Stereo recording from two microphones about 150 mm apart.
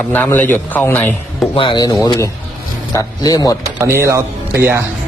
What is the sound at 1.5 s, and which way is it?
Speech, 30° left (ahead or behind).